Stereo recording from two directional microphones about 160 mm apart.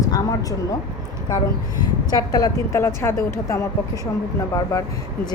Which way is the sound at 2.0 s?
25° left (ahead or behind).